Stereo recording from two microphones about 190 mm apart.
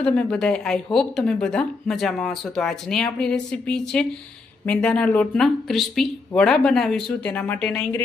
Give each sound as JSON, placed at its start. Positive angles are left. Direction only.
{"t": 0.0, "sound": "a woman's voice", "side_deg": 5}